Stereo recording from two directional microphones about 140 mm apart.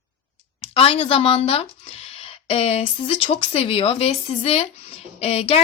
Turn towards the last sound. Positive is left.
turn(degrees=45)  # may be behind; listen again after turning